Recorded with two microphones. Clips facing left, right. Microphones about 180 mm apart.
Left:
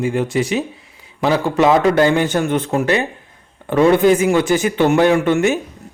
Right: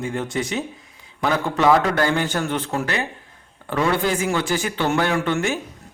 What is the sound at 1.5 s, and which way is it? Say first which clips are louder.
A man's voice: left 4 dB; 20° left (ahead or behind).